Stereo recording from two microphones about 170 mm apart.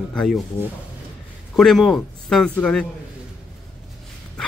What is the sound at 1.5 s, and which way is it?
Speech, centre (ahead or behind).